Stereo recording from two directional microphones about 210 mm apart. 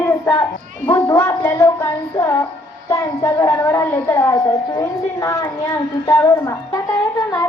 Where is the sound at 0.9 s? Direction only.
15° left (ahead or behind).